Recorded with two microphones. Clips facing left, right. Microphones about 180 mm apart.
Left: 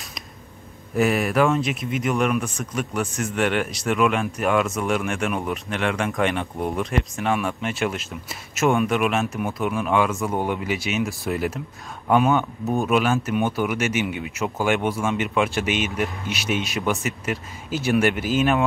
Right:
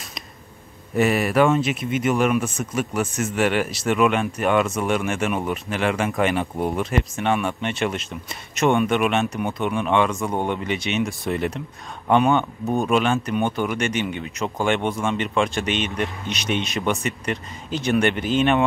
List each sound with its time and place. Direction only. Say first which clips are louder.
0.9 s speech: right 1 dB; centre (ahead or behind)